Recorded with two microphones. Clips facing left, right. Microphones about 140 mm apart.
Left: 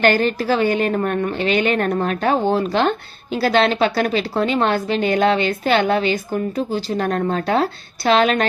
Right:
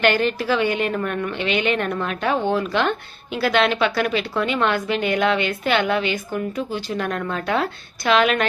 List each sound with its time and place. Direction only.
0.0 s a woman's voice: 40° left (ahead or behind)